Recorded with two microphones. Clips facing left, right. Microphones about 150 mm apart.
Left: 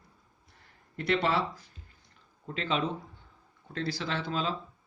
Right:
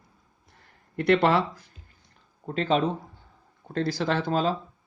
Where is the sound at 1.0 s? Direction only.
60° right (ahead or behind).